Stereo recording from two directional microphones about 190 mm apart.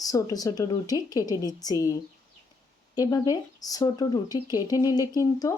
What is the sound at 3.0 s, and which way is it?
Speech, 20° left (ahead or behind).